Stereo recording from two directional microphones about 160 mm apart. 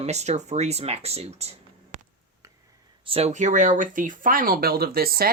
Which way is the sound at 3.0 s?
40° right (ahead or behind).